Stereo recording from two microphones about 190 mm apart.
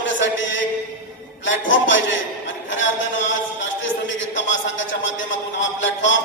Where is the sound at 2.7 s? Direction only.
75° left (ahead or behind).